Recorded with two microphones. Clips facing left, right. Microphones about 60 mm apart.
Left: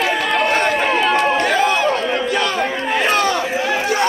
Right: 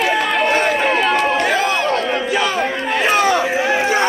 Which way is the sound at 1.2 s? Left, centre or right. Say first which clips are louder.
Left 1 dB; centre.